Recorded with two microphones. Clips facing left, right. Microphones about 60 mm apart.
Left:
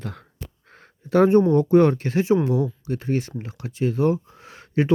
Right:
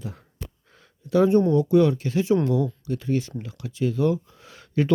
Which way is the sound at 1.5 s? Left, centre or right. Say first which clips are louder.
Left 2 dB; left.